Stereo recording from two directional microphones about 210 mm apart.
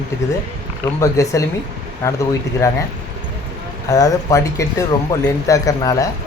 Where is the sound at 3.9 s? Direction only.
15° left (ahead or behind).